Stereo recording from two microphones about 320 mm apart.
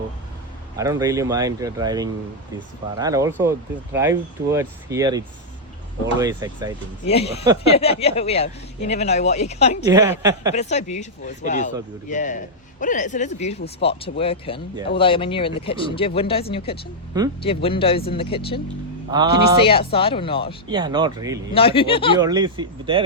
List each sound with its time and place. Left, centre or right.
0.8 s speech: centre
7.1 s speech: centre
9.8 s speech: centre
10.5 s speech: left
19.1 s speech: centre
19.6 s speech: centre
20.7 s speech: centre
21.5 s speech: centre
22.2 s speech: centre